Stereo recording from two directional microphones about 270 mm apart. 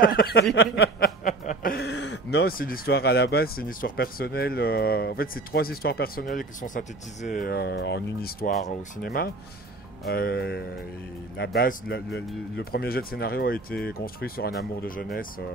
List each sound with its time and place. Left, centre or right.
0.0 s speech: left